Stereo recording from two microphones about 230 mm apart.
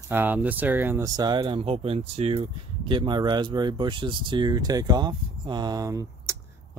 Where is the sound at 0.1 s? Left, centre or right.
Centre.